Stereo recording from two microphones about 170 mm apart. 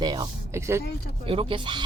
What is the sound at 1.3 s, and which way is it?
Speech, 30° right (ahead or behind).